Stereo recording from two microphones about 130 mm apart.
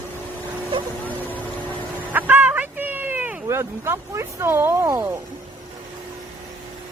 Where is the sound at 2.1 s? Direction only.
15° right (ahead or behind).